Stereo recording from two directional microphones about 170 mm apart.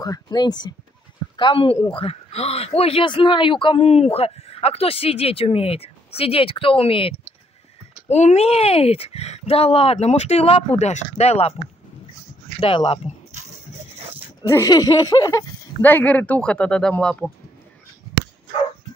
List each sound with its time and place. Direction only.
0.0 s speech: 20° left (ahead or behind); by 11.5 s 40° left (ahead or behind)
12.5 s speech: 35° left (ahead or behind)
14.5 s speech: 20° left (ahead or behind)
15.8 s speech: 10° left (ahead or behind)